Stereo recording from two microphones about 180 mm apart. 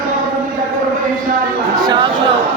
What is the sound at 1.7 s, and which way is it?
Chatter, 25° right (ahead or behind).